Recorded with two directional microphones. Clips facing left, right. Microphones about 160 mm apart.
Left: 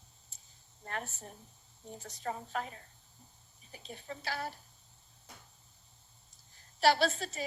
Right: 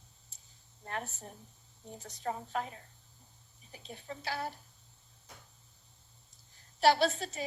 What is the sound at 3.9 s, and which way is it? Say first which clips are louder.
Speech: right 1 dB; 15° right (ahead or behind).